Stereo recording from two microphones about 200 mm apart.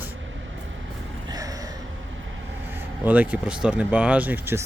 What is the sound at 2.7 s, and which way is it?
Speech, 10° right (ahead or behind).